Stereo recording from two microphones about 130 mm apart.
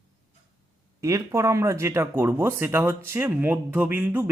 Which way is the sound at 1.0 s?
25° right (ahead or behind).